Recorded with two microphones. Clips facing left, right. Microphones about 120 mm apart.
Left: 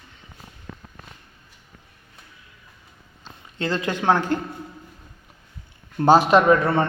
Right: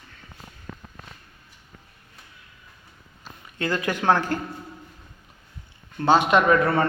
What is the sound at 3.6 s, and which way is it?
Speech, 25° left (ahead or behind).